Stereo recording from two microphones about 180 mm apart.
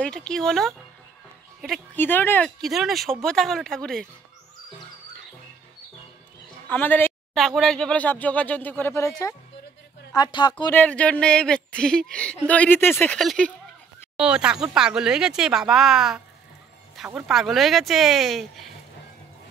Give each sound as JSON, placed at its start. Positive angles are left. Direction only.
{"t": 0.0, "sound": "speech", "side_deg": 5}
{"t": 2.0, "sound": "speech", "side_deg": 10}
{"t": 6.7, "sound": "speech", "side_deg": 10}
{"t": 10.1, "sound": "speech", "side_deg": 25}
{"t": 10.7, "sound": "speech", "side_deg": 10}